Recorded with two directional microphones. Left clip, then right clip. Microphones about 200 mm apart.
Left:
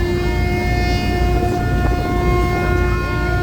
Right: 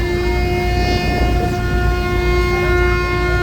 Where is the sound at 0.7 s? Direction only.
40° left (ahead or behind).